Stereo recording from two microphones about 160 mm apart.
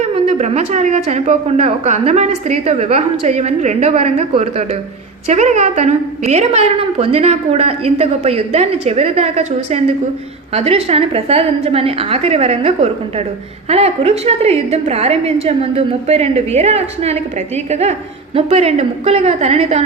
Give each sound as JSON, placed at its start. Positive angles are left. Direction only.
{"t": 0.0, "sound": "a woman's voice", "side_deg": -45}